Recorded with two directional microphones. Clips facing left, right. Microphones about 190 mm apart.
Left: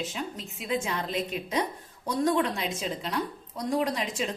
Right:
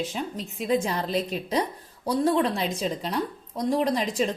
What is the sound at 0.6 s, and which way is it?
A woman's voice, 35° right (ahead or behind).